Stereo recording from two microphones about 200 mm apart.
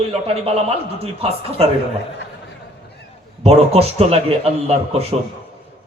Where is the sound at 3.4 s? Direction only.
30° right (ahead or behind).